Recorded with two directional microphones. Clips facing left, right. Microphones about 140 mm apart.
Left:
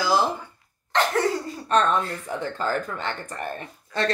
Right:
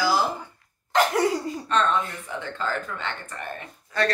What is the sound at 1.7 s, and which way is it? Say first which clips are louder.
Speech: left 3 dB; 40° left (ahead or behind).